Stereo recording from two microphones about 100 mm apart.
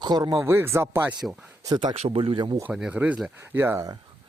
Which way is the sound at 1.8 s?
70° right (ahead or behind).